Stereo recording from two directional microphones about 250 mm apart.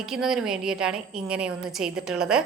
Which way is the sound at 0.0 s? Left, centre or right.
Centre.